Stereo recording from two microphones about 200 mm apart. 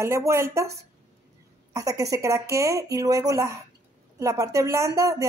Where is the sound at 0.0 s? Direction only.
15° right (ahead or behind).